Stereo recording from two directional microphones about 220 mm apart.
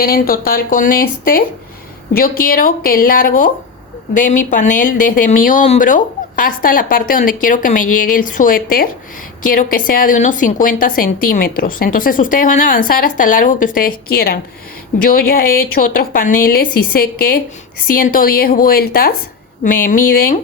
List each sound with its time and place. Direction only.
0.0 s a woman's voice: 40° left (ahead or behind)